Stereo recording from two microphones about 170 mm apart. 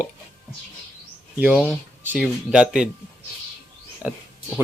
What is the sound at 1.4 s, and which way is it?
Speech, 5° right (ahead or behind).